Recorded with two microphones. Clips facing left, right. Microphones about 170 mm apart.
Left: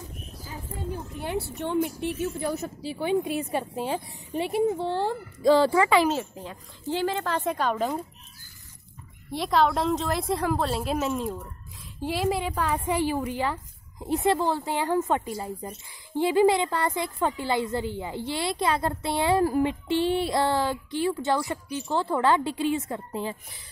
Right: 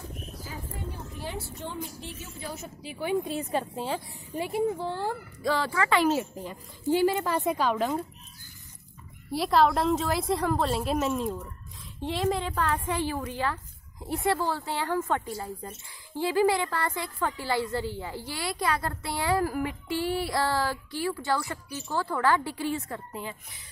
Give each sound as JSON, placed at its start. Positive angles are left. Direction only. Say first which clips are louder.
{"t": 1.2, "sound": "a woman's voice", "louder": "left 7 dB", "side_deg": 65}
{"t": 2.8, "sound": "a woman's voice", "louder": "left 2 dB", "side_deg": 30}
{"t": 4.9, "sound": "a woman's voice", "louder": "left 4 dB", "side_deg": 25}
{"t": 6.0, "sound": "a woman's voice", "louder": "right 1 dB", "side_deg": -5}
{"t": 9.3, "sound": "a woman's voice", "louder": "even", "side_deg": 0}